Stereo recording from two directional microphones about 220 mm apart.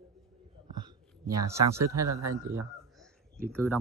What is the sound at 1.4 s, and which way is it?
Speech, 15° right (ahead or behind).